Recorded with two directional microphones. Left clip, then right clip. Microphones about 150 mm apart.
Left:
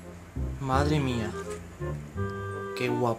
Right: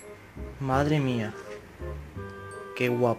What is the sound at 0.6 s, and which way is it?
Speech, 30° right (ahead or behind).